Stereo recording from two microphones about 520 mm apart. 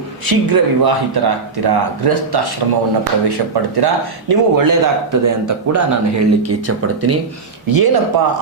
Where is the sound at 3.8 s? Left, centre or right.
Right.